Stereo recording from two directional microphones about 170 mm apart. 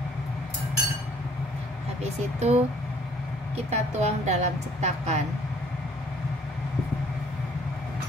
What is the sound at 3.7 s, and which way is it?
Speech, 40° right (ahead or behind).